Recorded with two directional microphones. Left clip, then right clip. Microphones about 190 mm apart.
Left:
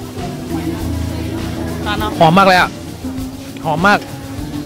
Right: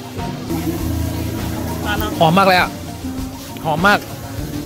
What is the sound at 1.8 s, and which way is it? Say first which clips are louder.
Music: left 2 dB; 40° left (ahead or behind).